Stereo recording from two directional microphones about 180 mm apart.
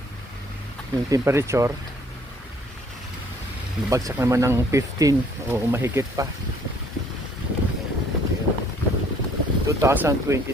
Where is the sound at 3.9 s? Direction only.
15° right (ahead or behind).